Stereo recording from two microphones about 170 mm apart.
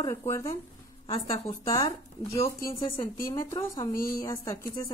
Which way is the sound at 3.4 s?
15° left (ahead or behind).